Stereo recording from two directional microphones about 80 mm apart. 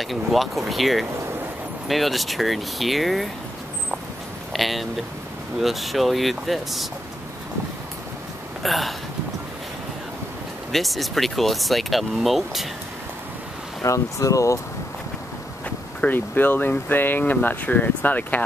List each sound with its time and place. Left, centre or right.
0.0 s speech: centre
4.5 s speech: centre
8.6 s speech: centre
10.7 s speech: centre
13.8 s speech: left
16.0 s speech: left